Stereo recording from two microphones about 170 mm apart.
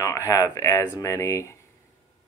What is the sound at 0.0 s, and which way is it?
Speech, 20° left (ahead or behind).